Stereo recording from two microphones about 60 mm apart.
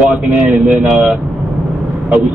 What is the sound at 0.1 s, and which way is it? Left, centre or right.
Speech, right.